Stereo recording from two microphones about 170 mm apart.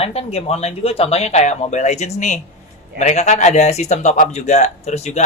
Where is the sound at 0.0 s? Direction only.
35° left (ahead or behind).